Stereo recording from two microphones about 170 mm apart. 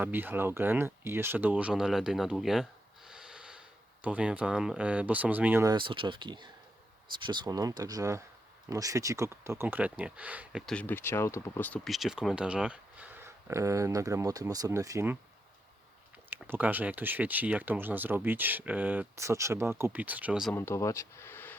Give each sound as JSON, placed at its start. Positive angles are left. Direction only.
{"t": 0.0, "sound": "speech", "side_deg": -10}
{"t": 5.7, "sound": "speech", "side_deg": -30}
{"t": 10.7, "sound": "speech", "side_deg": 10}
{"t": 11.9, "sound": "speech", "side_deg": 0}
{"t": 16.3, "sound": "speech", "side_deg": -10}
{"t": 20.5, "sound": "speech", "side_deg": 15}